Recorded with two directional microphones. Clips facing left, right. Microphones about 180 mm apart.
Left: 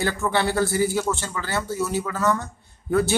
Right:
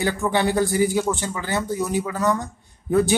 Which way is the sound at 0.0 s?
15° right (ahead or behind).